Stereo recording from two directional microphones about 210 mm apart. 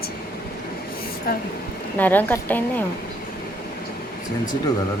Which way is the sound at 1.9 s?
10° left (ahead or behind).